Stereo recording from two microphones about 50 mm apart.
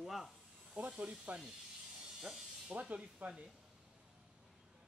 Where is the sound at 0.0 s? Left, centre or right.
Centre.